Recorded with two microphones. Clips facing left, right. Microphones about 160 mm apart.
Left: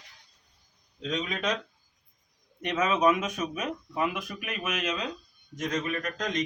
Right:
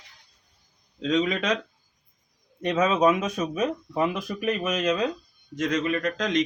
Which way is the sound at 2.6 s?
30° right (ahead or behind).